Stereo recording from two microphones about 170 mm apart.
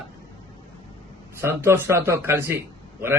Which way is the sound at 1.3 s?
15° right (ahead or behind).